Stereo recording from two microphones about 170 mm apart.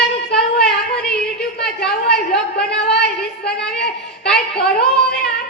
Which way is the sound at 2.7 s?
70° left (ahead or behind).